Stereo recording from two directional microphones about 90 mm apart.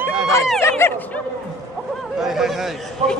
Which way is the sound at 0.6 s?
25° left (ahead or behind).